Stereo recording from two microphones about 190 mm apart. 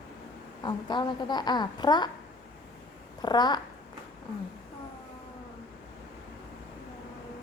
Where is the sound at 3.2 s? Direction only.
20° left (ahead or behind).